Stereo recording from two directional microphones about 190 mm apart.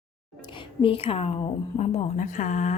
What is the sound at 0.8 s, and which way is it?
Speech, 30° left (ahead or behind).